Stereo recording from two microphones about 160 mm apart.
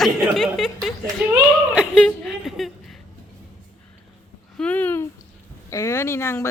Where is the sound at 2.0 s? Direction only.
Centre (ahead or behind).